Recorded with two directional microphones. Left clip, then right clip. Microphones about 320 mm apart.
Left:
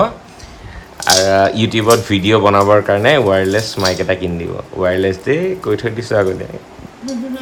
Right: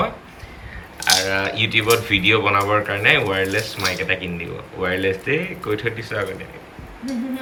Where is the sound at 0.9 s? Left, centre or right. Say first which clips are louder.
Left 7 dB; centre.